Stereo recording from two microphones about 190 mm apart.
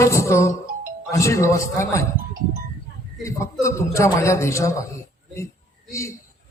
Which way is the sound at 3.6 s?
15° left (ahead or behind).